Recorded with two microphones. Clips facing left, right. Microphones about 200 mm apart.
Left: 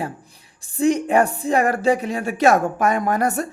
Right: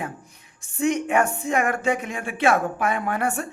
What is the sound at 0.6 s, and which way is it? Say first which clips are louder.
Speech: left 4 dB; 35° left (ahead or behind).